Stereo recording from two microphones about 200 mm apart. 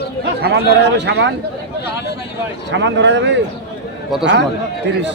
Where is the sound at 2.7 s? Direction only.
60° right (ahead or behind).